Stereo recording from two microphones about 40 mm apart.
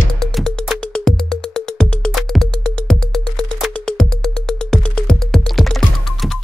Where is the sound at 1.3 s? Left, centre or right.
Centre.